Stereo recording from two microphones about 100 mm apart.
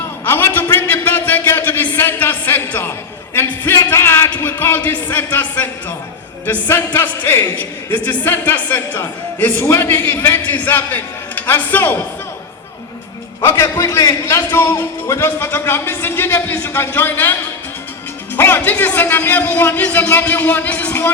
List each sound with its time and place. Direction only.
0.3 s a sound: 20° left (ahead or behind)
4.3 s a man's voice: 20° left (ahead or behind)
13.4 s a man's voice: 25° left (ahead or behind)
18.3 s a man's voice: 20° left (ahead or behind)